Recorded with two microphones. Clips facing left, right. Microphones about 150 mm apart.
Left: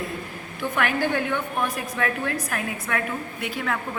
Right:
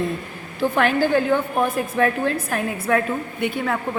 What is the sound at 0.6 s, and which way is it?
A woman's voice, 30° right (ahead or behind).